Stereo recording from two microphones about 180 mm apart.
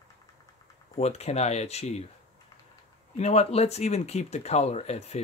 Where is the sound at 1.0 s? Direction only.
35° left (ahead or behind).